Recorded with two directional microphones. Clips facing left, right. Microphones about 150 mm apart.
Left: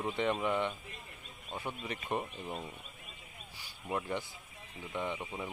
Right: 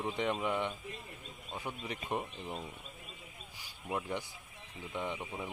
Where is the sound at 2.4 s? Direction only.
5° left (ahead or behind).